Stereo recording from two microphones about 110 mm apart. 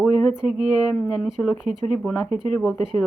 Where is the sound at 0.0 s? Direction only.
5° right (ahead or behind).